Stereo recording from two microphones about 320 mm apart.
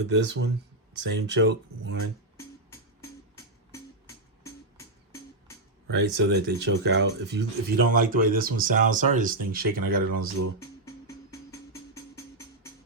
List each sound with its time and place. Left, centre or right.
0.1 s speech: right
3.0 s music: centre
5.9 s speech: right
10.6 s music: centre